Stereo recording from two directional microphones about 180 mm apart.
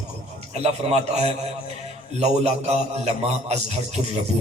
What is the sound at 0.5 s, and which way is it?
A man's voice, 35° right (ahead or behind).